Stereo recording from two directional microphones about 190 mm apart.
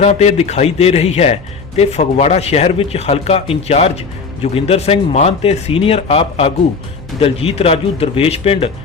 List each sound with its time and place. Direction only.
0.0 s a man's voice: 35° left (ahead or behind)